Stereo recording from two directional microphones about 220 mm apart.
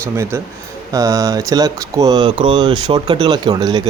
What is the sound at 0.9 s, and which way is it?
Speech, 15° right (ahead or behind).